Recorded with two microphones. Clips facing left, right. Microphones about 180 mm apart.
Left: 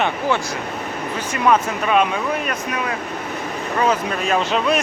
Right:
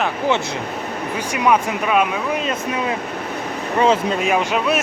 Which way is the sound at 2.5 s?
25° right (ahead or behind).